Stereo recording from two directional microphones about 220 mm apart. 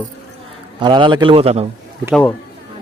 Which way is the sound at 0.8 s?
20° right (ahead or behind).